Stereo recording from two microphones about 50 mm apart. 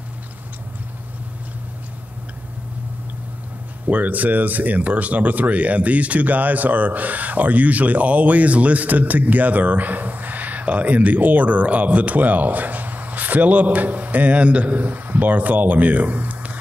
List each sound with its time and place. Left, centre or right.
3.8 s speech: right